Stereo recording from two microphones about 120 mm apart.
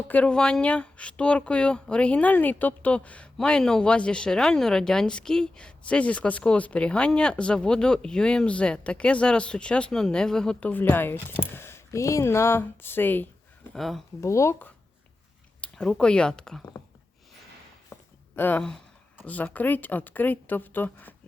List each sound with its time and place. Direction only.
0.1 s speech: 10° left (ahead or behind)
13.7 s speech: centre (ahead or behind)
14.2 s speech: 25° left (ahead or behind)
15.6 s speech: 5° left (ahead or behind)
18.3 s speech: 15° left (ahead or behind)